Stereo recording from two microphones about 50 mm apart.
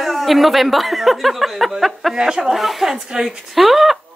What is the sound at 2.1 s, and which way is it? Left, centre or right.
Speech, centre.